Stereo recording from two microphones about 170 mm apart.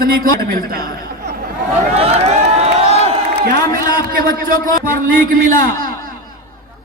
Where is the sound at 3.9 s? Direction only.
55° right (ahead or behind).